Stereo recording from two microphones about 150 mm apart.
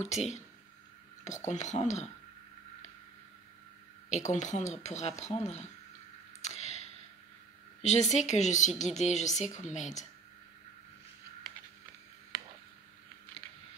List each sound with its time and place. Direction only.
0.0 s a woman's voice: 50° left (ahead or behind)
4.1 s a woman's voice: 50° left (ahead or behind)
6.4 s a sound: 50° left (ahead or behind)
7.8 s a woman's voice: 50° left (ahead or behind)